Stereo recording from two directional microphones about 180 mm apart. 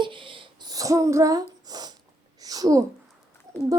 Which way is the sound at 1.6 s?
20° right (ahead or behind).